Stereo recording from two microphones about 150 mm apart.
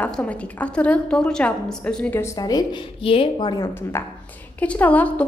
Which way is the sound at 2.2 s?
20° left (ahead or behind).